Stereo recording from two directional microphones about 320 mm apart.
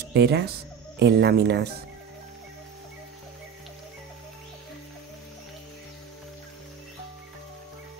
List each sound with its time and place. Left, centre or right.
0.1 s speech: right